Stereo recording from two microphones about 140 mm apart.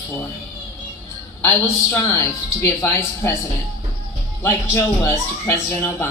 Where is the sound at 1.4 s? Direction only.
15° left (ahead or behind).